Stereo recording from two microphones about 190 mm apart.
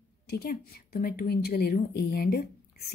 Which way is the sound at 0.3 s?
55° left (ahead or behind).